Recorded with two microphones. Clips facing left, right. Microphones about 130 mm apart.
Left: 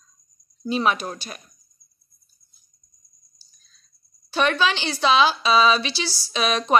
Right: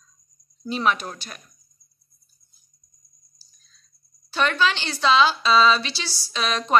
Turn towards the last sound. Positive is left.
turn(degrees=15)  # may be behind; listen again after turning